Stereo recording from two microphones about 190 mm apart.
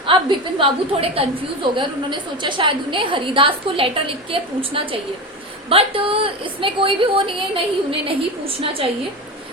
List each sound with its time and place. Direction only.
0.0 s a woman's voice: 25° right (ahead or behind)